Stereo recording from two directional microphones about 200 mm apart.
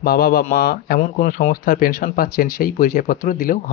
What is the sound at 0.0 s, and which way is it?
Speech, 50° left (ahead or behind).